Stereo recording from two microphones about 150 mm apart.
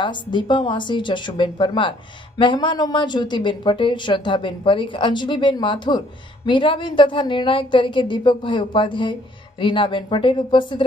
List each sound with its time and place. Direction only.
0.0 s a woman's voice: 30° left (ahead or behind)